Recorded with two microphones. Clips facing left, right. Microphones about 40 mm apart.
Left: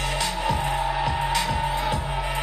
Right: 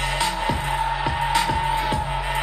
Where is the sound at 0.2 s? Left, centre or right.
Right.